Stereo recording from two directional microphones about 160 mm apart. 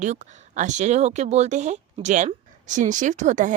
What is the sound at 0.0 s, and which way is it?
Speech, 50° right (ahead or behind).